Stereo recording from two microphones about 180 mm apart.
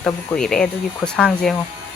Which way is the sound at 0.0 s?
5° left (ahead or behind).